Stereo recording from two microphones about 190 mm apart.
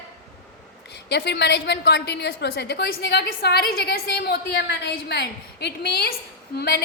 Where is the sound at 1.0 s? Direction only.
60° left (ahead or behind).